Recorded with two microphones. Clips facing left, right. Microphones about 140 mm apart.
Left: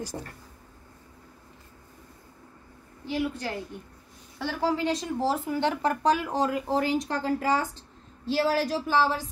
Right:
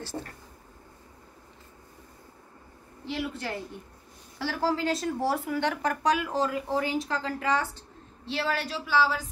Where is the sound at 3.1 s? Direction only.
15° left (ahead or behind).